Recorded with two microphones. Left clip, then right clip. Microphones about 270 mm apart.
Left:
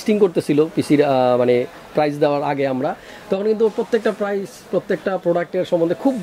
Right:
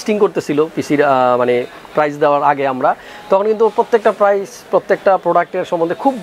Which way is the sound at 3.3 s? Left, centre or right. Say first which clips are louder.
Right 6 dB; right.